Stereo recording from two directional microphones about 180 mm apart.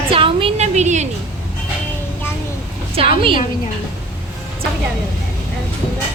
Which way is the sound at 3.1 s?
30° right (ahead or behind).